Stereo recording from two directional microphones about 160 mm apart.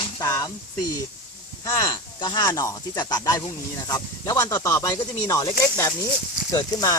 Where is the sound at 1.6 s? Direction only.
25° left (ahead or behind).